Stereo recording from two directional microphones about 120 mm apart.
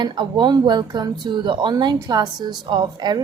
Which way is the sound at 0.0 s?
40° right (ahead or behind).